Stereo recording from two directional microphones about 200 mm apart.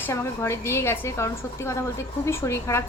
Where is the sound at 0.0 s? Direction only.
10° left (ahead or behind).